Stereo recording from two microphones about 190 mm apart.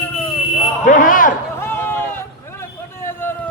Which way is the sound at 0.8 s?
45° left (ahead or behind).